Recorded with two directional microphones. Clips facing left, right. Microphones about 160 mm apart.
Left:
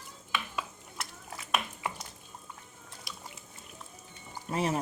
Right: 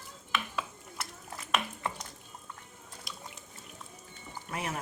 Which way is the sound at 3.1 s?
Centre (ahead or behind).